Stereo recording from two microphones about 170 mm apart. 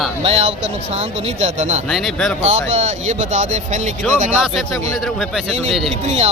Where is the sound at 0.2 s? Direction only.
35° right (ahead or behind).